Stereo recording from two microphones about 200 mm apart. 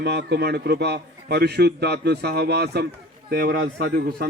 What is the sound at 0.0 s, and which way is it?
A man's voice, 55° right (ahead or behind).